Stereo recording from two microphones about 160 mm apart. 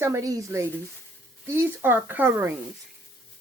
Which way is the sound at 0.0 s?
20° right (ahead or behind).